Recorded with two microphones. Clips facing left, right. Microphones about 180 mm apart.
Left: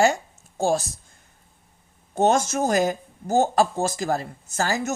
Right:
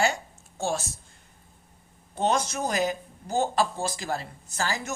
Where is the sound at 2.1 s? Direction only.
45° left (ahead or behind).